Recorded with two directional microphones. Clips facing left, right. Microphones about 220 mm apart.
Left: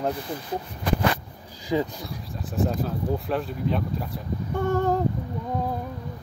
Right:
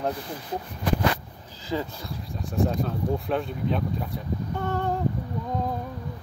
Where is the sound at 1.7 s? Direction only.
15° left (ahead or behind).